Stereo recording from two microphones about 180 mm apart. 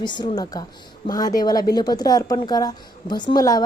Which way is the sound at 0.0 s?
25° left (ahead or behind).